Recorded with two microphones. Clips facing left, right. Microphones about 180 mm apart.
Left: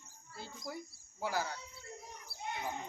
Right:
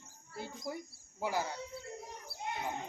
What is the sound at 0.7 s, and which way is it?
Speech, 15° right (ahead or behind).